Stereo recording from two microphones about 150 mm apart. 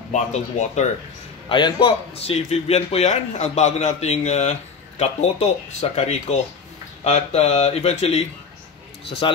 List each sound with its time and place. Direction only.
0.1 s a man's voice: 50° left (ahead or behind)
1.5 s a man's voice: 35° left (ahead or behind)